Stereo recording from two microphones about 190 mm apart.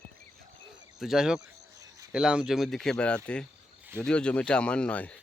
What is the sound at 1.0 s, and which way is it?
Speech, centre (ahead or behind).